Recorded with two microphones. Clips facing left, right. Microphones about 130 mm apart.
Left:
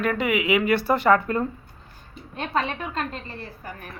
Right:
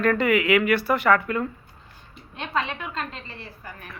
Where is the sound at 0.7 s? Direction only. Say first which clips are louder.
Left 1 dB; 25° left (ahead or behind).